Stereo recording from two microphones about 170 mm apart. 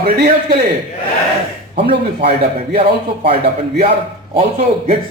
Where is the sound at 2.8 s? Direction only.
70° right (ahead or behind).